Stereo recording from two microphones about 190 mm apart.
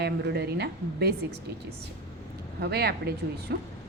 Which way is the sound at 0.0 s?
60° right (ahead or behind).